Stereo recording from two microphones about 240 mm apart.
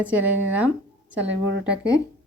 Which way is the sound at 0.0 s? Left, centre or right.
Centre.